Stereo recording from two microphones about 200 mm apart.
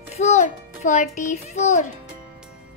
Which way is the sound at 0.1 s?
35° left (ahead or behind).